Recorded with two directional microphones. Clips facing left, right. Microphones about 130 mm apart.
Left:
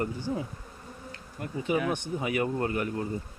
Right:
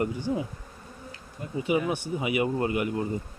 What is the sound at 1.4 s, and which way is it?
Bee, 60° left (ahead or behind).